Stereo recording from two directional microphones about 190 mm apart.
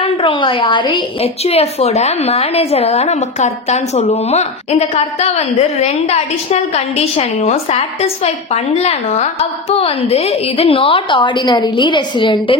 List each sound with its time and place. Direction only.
0.0 s a woman's voice: 25° left (ahead or behind)